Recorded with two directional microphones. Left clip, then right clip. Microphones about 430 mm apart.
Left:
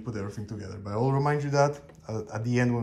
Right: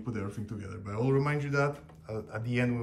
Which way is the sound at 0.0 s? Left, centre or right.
Centre.